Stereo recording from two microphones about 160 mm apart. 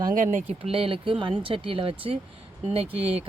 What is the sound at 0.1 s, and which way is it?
Speech, 55° right (ahead or behind).